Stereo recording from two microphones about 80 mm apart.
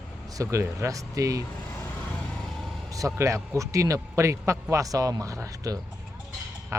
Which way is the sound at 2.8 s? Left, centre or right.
Right.